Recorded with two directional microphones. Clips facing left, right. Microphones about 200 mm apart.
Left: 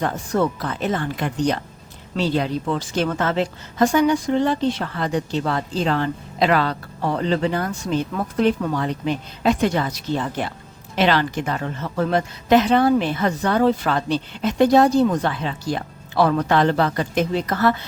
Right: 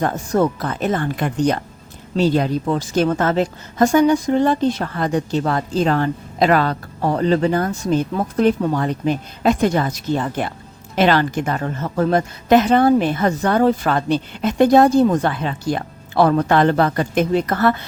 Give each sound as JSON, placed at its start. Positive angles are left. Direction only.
{"t": 0.0, "sound": "a woman's voice", "side_deg": -45}